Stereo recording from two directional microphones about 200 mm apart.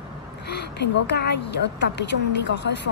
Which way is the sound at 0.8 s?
55° left (ahead or behind).